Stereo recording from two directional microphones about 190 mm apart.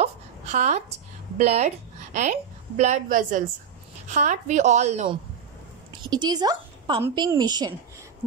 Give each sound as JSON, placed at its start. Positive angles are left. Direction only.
{"t": 0.0, "sound": "a sound", "side_deg": -40}
{"t": 1.4, "sound": "a woman's voice", "side_deg": -35}
{"t": 6.0, "sound": "a woman's voice", "side_deg": -20}